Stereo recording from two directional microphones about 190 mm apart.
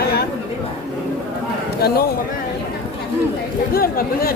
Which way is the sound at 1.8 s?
55° left (ahead or behind).